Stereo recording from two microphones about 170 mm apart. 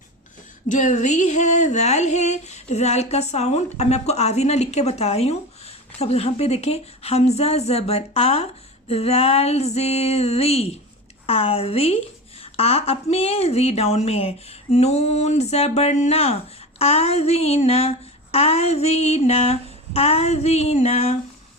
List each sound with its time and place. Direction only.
0.7 s a woman's voice: 45° left (ahead or behind)